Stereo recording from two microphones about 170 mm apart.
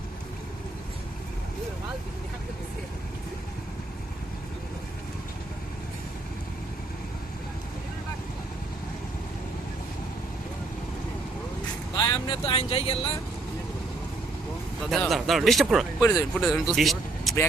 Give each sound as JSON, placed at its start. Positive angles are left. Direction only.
{"t": 11.9, "sound": "speech", "side_deg": 25}
{"t": 14.8, "sound": "speech", "side_deg": 0}